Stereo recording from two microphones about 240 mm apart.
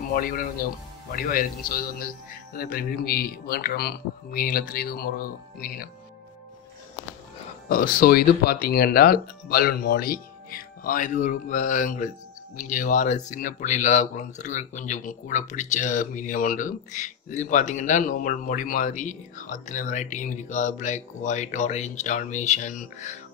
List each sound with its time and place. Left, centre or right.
0.1 s speech: left
7.7 s speech: left